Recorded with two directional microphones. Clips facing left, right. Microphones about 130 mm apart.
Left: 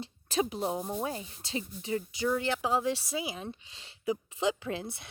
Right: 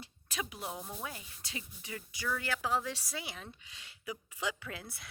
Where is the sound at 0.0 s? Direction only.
30° left (ahead or behind).